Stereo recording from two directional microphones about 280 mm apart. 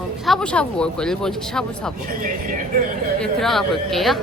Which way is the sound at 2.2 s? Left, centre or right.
Right.